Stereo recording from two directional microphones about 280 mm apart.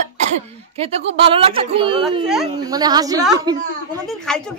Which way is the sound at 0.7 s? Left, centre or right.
Right.